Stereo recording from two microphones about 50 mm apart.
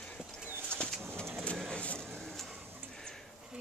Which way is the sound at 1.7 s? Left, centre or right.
Left.